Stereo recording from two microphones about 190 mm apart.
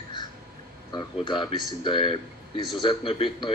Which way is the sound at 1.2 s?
25° left (ahead or behind).